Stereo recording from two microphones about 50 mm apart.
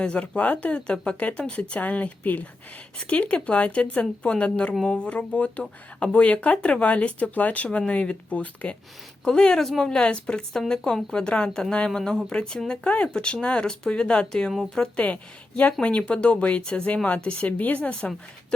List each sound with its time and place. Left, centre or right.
0.0 s speech: left
9.2 s a woman's voice: centre
17.2 s speech: centre
17.6 s speech: left